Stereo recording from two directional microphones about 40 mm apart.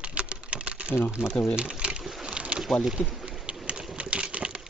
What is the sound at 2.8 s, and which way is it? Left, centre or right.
Speech, centre.